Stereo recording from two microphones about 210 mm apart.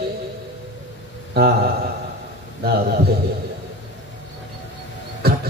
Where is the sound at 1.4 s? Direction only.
45° right (ahead or behind).